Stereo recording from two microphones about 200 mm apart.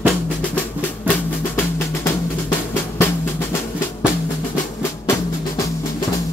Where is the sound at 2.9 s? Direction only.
10° left (ahead or behind).